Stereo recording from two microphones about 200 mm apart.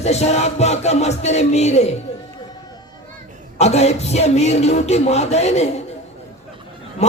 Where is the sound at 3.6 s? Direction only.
35° left (ahead or behind).